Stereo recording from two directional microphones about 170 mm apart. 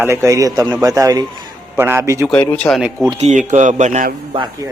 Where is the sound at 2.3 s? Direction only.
10° left (ahead or behind).